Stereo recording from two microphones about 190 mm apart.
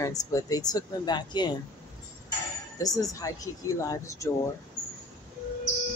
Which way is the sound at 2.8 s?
20° left (ahead or behind).